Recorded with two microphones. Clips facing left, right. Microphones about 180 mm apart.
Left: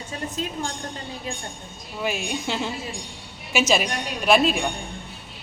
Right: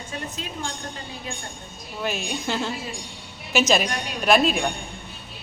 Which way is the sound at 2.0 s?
5° left (ahead or behind).